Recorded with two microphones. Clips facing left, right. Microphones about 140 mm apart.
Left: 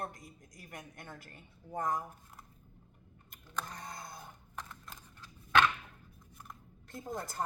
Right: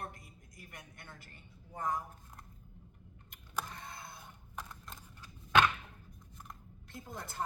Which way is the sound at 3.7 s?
40° left (ahead or behind).